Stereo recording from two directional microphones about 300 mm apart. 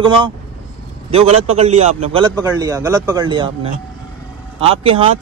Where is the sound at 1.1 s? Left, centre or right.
Centre.